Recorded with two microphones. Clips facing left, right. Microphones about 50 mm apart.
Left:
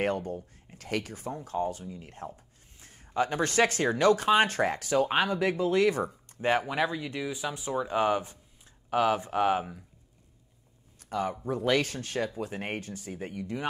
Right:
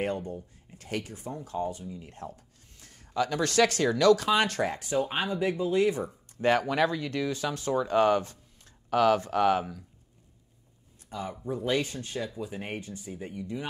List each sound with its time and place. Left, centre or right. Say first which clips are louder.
0.0 s speech: left 2 dB; left
4.7 s speech: left 3 dB; left
6.4 s speech: right 2 dB; left
11.0 s a sound: left 6 dB; left
11.5 s speech: left 1 dB; left
12.4 s speech: left 2 dB; left
13.1 s speech: left 1 dB; left